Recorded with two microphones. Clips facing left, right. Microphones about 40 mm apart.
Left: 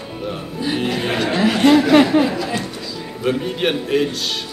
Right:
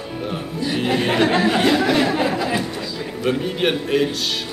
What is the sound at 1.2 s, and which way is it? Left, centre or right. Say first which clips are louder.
Speech: left 1 dB; right.